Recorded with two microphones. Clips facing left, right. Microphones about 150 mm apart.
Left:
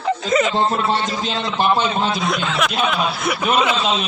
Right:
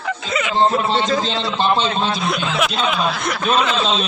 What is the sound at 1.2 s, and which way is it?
Speech, 15° left (ahead or behind).